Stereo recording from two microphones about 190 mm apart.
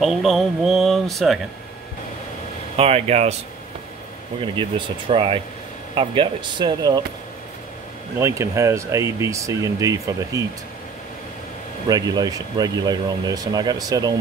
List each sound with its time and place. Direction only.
0.0 s speech: centre (ahead or behind)
2.7 s speech: 30° right (ahead or behind)
4.6 s speech: 25° right (ahead or behind)
8.2 s speech: 15° right (ahead or behind)
11.9 s speech: 20° right (ahead or behind)